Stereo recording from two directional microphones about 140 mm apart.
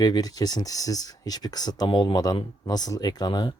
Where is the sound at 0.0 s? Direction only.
25° left (ahead or behind).